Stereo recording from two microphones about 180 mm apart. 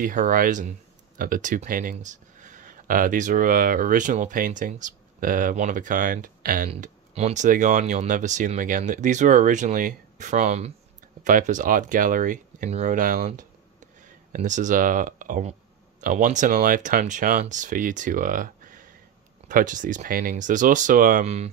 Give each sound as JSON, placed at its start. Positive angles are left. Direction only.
{"t": 0.0, "sound": "speech", "side_deg": -50}
{"t": 6.7, "sound": "speech", "side_deg": -35}
{"t": 13.3, "sound": "a sound", "side_deg": -45}
{"t": 16.0, "sound": "speech", "side_deg": -45}